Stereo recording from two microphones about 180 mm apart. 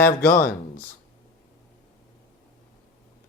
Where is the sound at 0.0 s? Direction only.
55° left (ahead or behind).